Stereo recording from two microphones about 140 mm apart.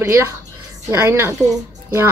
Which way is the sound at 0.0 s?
20° right (ahead or behind).